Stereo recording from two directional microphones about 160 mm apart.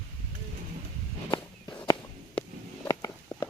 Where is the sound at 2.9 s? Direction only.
20° left (ahead or behind).